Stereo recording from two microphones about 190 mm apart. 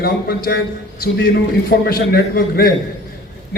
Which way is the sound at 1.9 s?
50° left (ahead or behind).